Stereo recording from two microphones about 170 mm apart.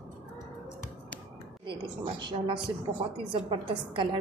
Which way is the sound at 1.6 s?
30° right (ahead or behind).